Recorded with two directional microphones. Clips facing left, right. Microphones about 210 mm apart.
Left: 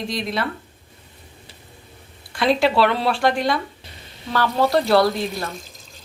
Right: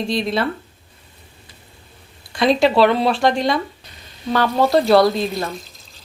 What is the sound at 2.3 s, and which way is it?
A woman's voice, 20° right (ahead or behind).